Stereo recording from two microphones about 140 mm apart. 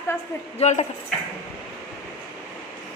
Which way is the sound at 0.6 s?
55° left (ahead or behind).